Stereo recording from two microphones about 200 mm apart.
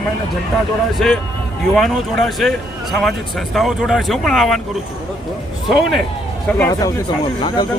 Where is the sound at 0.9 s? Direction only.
Centre (ahead or behind).